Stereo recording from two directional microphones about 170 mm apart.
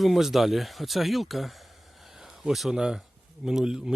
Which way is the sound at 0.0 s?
Centre (ahead or behind).